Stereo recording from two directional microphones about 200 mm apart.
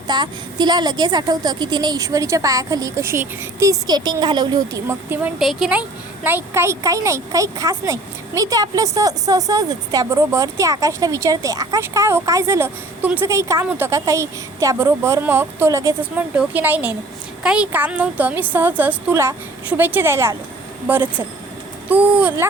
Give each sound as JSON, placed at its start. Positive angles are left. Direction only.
{"t": 0.1, "sound": "a woman's voice", "side_deg": -20}